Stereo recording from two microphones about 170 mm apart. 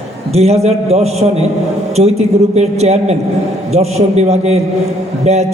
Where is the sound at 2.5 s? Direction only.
40° right (ahead or behind).